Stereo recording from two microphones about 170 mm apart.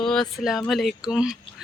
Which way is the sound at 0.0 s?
5° left (ahead or behind).